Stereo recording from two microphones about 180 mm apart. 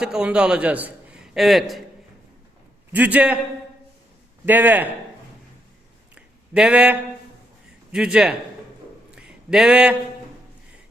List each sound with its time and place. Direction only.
0.0 s a man's voice: 5° right (ahead or behind)
2.9 s a man's voice: 10° right (ahead or behind)
4.4 s a man's voice: 10° right (ahead or behind)
6.1 s a sound: 5° right (ahead or behind)
7.9 s a man's voice: 5° right (ahead or behind)
9.1 s a sound: 5° right (ahead or behind)